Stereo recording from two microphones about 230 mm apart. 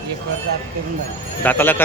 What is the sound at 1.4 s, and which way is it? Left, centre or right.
Speech, centre.